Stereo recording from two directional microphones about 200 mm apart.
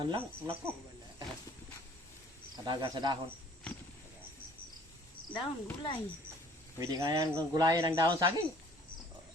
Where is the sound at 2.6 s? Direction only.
20° right (ahead or behind).